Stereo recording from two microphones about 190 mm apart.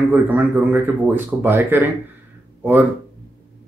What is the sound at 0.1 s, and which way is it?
Speech, 10° right (ahead or behind).